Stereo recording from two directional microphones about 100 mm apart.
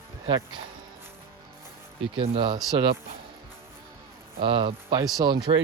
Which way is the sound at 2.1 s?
65° right (ahead or behind).